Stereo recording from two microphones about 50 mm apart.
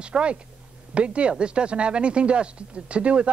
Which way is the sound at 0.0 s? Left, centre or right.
Right.